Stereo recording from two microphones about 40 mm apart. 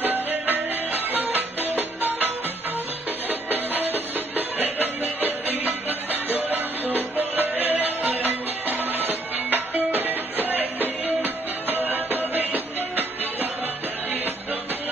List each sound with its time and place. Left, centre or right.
0.0 s music: right